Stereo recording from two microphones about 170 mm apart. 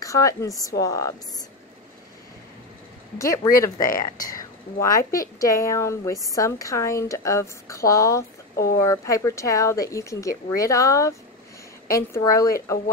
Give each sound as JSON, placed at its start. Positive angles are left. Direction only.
{"t": 0.0, "sound": "a woman's voice", "side_deg": 20}
{"t": 3.2, "sound": "a woman's voice", "side_deg": 20}